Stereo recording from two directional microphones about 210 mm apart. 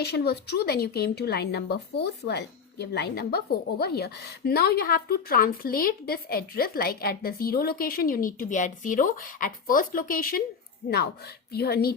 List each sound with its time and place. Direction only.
0.0 s speech: 50° left (ahead or behind)